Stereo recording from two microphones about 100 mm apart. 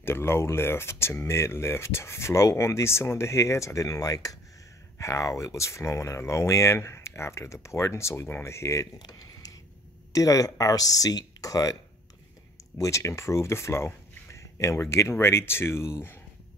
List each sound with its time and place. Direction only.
0.0 s speech: 25° left (ahead or behind)
8.9 s a sound: 40° left (ahead or behind)
10.1 s speech: 35° left (ahead or behind)
12.8 s speech: 30° left (ahead or behind)